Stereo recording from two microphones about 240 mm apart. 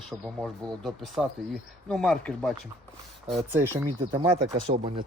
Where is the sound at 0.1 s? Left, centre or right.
Centre.